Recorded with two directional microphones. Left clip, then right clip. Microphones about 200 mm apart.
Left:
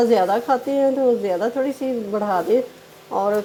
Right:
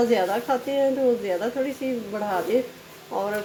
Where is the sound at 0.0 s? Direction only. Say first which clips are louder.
Left 5 dB; 35° left (ahead or behind).